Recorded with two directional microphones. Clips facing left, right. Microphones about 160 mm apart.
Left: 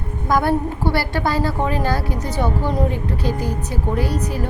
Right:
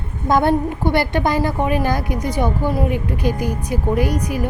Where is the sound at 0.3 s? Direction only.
25° right (ahead or behind).